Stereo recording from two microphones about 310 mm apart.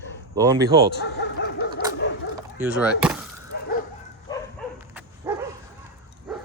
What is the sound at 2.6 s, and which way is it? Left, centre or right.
Speech, centre.